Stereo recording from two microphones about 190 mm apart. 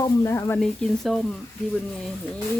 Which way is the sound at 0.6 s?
Centre (ahead or behind).